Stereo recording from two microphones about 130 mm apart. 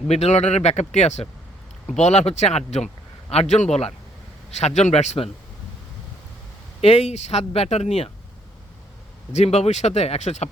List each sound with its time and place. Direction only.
0.1 s speech: 55° left (ahead or behind)
6.8 s speech: 55° left (ahead or behind)
9.3 s speech: 55° left (ahead or behind)